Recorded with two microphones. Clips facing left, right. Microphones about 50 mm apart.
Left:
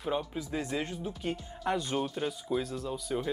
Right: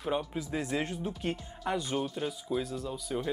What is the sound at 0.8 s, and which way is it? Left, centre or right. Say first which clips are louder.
Speech: right 1 dB; right.